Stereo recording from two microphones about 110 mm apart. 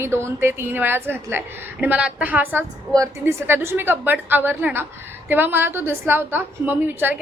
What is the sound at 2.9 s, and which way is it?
A woman's voice, 25° right (ahead or behind).